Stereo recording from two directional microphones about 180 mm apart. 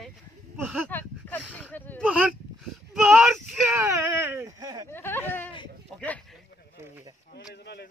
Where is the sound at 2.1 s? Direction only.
Centre (ahead or behind).